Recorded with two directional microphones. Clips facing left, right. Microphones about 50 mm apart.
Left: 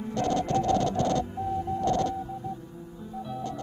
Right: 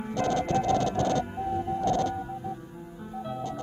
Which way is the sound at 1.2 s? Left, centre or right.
Right.